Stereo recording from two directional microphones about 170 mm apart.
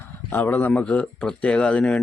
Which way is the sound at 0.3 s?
10° left (ahead or behind).